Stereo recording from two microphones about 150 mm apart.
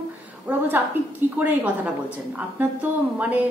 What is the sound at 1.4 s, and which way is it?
A woman's voice, 10° right (ahead or behind).